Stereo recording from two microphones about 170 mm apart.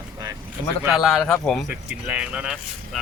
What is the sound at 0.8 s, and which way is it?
Speech, centre (ahead or behind).